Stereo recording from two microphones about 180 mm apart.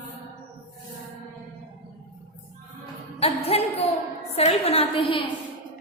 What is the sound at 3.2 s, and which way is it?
A woman's voice, 35° left (ahead or behind).